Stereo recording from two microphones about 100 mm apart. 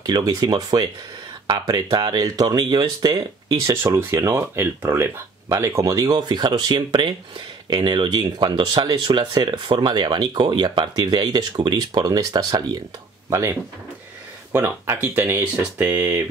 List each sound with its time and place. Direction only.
0.0 s speech: 40° right (ahead or behind)
2.5 s speech: 50° right (ahead or behind)
3.7 s speech: 25° right (ahead or behind)
13.3 s speech: 25° right (ahead or behind)